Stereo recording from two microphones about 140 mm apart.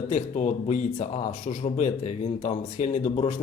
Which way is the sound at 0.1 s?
60° left (ahead or behind).